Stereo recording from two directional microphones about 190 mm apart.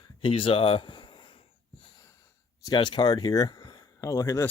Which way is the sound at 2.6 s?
25° left (ahead or behind).